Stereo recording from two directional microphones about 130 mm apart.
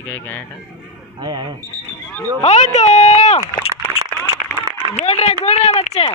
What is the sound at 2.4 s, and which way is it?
Speech, 60° left (ahead or behind).